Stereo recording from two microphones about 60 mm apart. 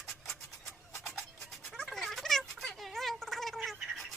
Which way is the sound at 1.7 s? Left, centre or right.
Centre.